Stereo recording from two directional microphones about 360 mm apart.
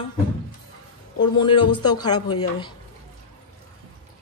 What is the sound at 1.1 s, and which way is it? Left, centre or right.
Speech, centre.